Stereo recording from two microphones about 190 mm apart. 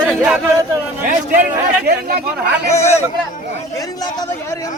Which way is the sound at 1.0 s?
45° right (ahead or behind).